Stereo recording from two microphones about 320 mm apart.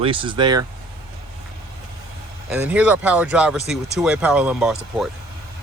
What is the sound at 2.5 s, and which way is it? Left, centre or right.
Speech, centre.